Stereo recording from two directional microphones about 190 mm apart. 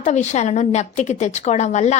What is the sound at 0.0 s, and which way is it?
A woman's voice, 40° left (ahead or behind).